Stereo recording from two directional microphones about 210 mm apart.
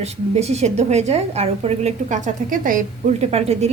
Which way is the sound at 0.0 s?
30° right (ahead or behind).